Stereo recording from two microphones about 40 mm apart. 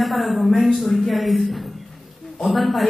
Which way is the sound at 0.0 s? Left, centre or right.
Centre.